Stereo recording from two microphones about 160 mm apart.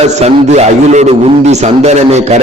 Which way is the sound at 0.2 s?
45° right (ahead or behind).